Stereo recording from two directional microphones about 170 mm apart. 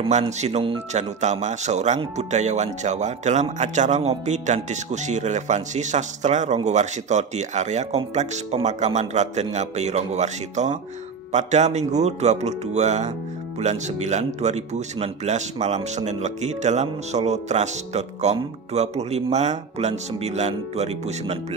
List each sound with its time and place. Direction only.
0.0 s speech: 40° right (ahead or behind)